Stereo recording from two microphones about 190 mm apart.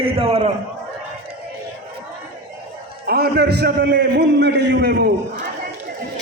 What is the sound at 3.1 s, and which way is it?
A man's voice, 55° right (ahead or behind).